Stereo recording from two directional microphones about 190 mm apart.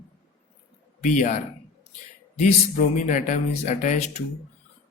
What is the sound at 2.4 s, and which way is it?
Speech, 40° left (ahead or behind).